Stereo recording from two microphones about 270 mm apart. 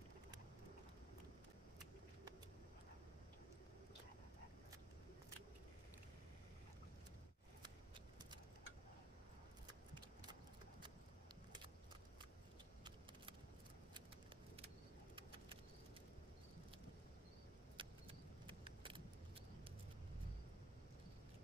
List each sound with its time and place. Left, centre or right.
17.7 s vehicle: centre